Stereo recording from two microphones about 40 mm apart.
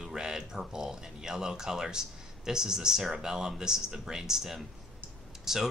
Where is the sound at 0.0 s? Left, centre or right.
Centre.